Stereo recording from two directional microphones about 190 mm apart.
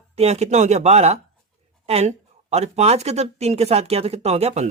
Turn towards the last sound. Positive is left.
turn(degrees=-35)  # may be behind; listen again after turning